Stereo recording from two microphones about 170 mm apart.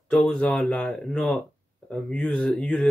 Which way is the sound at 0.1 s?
5° left (ahead or behind).